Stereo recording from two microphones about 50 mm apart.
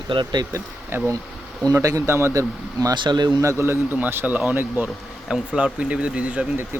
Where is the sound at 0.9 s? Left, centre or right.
Right.